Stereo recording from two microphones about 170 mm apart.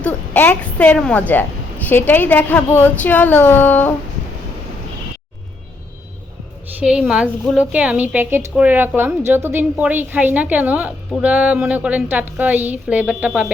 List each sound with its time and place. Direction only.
0.0 s speech: 10° left (ahead or behind)
6.7 s a woman's voice: 5° right (ahead or behind)